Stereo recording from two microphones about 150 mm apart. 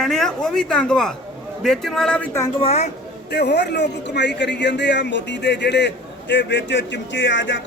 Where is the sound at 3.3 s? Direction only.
90° left.